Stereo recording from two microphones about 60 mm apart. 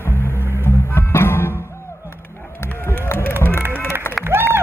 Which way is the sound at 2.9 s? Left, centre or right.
Left.